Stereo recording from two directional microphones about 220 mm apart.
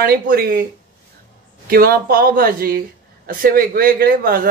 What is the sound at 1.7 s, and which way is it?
A man's voice, 40° right (ahead or behind).